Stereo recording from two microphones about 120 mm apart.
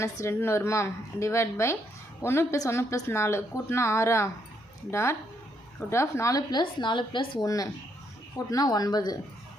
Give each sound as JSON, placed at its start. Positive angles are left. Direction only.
{"t": 0.0, "sound": "a woman's voice", "side_deg": 20}